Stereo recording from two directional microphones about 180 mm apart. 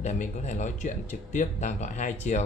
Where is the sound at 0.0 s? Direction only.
40° left (ahead or behind).